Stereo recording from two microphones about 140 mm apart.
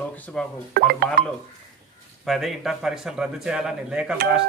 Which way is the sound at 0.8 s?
90° right.